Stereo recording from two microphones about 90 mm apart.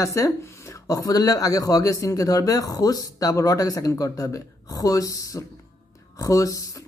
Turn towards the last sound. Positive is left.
turn(degrees=40)  # may be behind; listen again after turning